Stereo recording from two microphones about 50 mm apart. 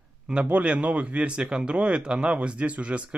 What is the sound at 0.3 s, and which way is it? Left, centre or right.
Speech, right.